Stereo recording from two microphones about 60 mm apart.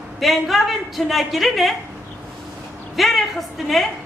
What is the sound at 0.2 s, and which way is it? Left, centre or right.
A woman's voice, centre.